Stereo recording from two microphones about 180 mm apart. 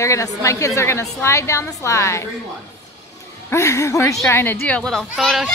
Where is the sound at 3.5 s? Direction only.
15° left (ahead or behind).